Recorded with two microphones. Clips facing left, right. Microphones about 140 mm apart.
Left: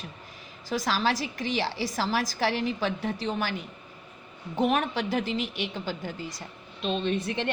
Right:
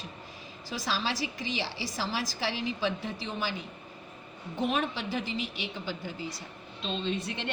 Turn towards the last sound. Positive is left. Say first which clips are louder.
# left 5 dB
turn(degrees=55)  # may be behind; listen again after turning